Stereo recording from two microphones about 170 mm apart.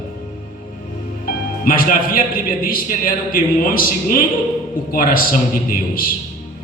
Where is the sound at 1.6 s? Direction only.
55° left (ahead or behind).